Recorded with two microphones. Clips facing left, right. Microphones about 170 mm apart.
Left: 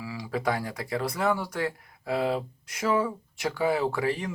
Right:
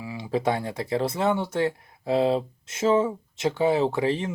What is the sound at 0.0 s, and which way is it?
Speech, 20° right (ahead or behind).